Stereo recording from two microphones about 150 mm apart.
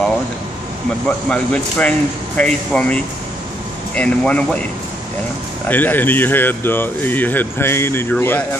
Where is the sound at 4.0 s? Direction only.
10° left (ahead or behind).